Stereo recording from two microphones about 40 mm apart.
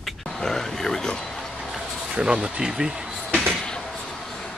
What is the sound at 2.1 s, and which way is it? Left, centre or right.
Speech, right.